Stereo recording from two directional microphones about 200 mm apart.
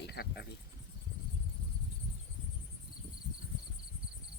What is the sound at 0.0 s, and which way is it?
Cricket, 55° left (ahead or behind).